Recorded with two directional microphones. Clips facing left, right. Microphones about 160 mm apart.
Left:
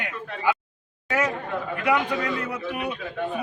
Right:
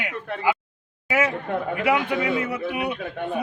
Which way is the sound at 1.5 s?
55° right (ahead or behind).